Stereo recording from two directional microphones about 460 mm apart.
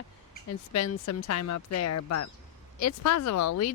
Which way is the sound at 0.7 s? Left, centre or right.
Left.